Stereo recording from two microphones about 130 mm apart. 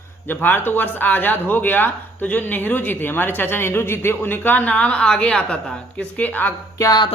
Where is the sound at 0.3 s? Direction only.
15° left (ahead or behind).